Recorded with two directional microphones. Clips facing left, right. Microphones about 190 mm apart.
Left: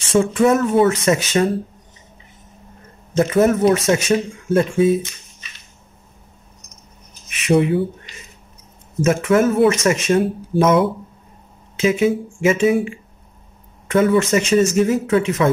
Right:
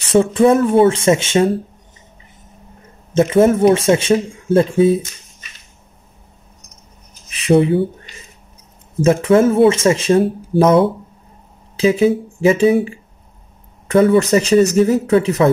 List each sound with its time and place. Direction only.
0.1 s speech: 35° right (ahead or behind)
3.2 s speech: 25° right (ahead or behind)
7.2 s speech: 30° right (ahead or behind)
9.0 s speech: 30° right (ahead or behind)